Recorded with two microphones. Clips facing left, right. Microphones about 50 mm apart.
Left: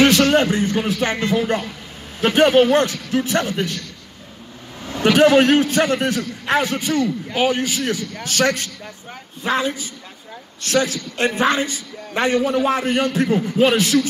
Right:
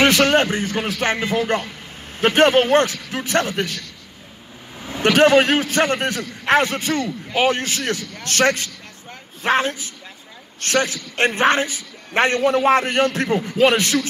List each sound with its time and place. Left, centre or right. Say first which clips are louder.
0.0 s a man's voice: left 1 dB; right
1.3 s a man's voice: left 2 dB; right
2.1 s speech: left 1 dB; right
3.3 s a man's voice: even; right
5.0 s a man's voice: left 1 dB; right
8.3 s a man's voice: right 1 dB; right